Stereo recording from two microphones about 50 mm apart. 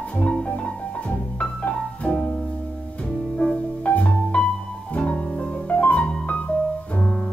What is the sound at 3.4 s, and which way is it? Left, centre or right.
Music, left.